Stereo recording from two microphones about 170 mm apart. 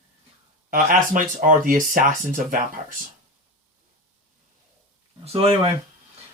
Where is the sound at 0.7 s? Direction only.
55° right (ahead or behind).